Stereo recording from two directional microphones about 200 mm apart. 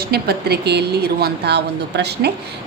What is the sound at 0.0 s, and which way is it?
A woman's voice, 50° right (ahead or behind).